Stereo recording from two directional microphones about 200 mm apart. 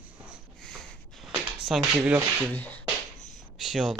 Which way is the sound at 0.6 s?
5° left (ahead or behind).